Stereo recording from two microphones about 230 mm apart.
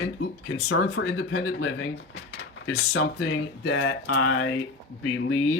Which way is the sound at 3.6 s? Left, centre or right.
Left.